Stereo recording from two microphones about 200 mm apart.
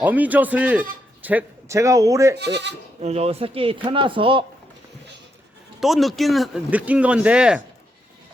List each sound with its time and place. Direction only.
0.0 s a man's voice: 10° right (ahead or behind)
2.3 s speech: 55° right (ahead or behind)
3.0 s speech: 30° right (ahead or behind)
5.8 s speech: centre (ahead or behind)